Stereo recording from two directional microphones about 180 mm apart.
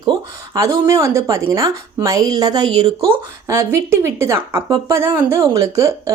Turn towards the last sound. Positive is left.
turn(degrees=-15)  # may be behind; listen again after turning